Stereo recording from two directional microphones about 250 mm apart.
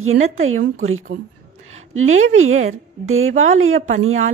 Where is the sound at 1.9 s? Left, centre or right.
Right.